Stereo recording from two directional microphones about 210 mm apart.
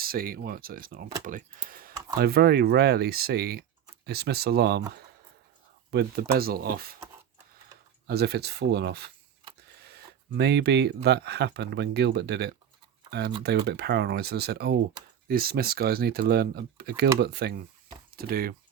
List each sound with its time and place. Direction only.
0.0 s speech: 45° right (ahead or behind)
5.9 s speech: 50° right (ahead or behind)
8.0 s speech: 50° right (ahead or behind)